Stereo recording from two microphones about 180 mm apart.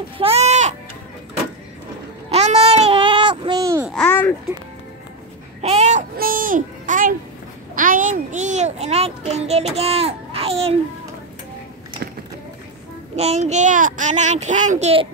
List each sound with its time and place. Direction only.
0.2 s sheep: 35° right (ahead or behind)
2.2 s a sound: 35° right (ahead or behind); by 3.8 s 20° right (ahead or behind)
3.9 s babbling: 10° left (ahead or behind)
5.6 s child singing: 35° right (ahead or behind)
6.1 s a sound: 50° right (ahead or behind)
7.7 s a child's voice: 50° right (ahead or behind); by 10.7 s 35° right (ahead or behind)
13.1 s a child's voice: 35° right (ahead or behind)